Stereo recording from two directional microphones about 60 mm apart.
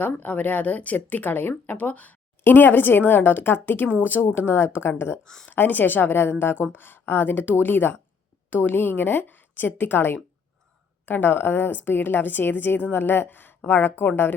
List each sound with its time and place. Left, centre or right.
0.0 s speech: left
5.5 s speech: left